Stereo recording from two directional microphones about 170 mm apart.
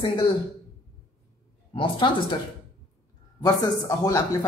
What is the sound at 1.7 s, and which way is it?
Speech, 30° left (ahead or behind).